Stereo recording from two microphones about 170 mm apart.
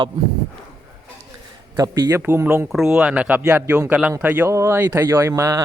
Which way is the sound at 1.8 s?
20° right (ahead or behind).